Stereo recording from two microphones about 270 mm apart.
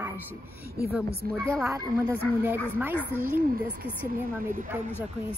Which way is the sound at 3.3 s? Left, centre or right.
Right.